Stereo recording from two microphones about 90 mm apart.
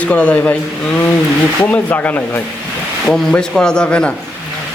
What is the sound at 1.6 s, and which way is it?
Speech, 15° left (ahead or behind).